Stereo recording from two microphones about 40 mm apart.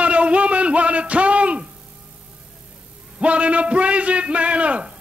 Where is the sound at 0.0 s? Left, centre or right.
Right.